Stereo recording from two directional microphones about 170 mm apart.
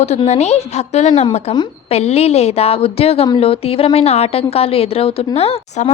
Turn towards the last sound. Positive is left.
turn(degrees=35)  # may be behind; listen again after turning